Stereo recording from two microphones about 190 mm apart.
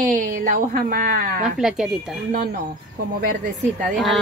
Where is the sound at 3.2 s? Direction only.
45° right (ahead or behind).